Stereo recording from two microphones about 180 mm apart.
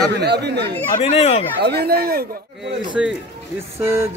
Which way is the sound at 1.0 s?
35° left (ahead or behind).